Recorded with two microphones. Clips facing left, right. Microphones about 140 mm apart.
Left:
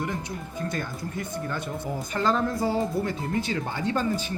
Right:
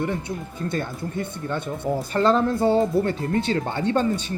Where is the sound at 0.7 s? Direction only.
30° right (ahead or behind).